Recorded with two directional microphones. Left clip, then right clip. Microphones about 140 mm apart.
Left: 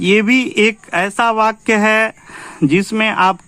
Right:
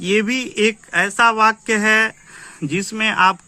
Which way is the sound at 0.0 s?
50° left (ahead or behind).